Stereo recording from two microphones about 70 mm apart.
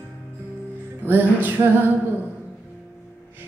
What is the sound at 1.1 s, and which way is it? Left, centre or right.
Music, right.